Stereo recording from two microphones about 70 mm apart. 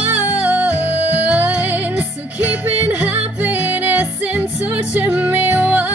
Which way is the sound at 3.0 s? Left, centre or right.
Right.